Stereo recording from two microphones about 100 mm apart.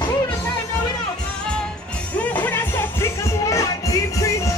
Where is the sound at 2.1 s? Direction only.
15° left (ahead or behind).